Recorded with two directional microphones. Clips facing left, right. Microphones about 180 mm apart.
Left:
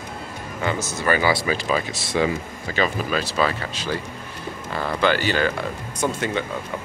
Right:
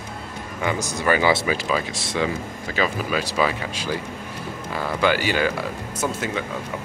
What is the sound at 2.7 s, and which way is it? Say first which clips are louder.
Speech: left 1 dB; 5° right (ahead or behind).